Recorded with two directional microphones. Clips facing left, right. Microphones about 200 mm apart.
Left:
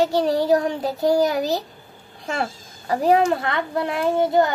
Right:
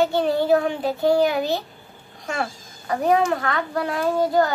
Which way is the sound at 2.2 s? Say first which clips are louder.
Left 1 dB; 30° left (ahead or behind).